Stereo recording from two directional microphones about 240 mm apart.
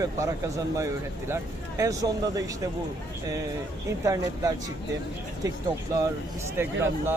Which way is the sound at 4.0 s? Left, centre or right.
Centre.